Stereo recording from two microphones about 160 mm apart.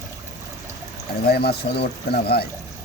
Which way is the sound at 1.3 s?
85° left.